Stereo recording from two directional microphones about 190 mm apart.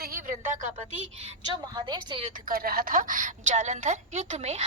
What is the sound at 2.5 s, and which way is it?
A woman's voice, 50° right (ahead or behind).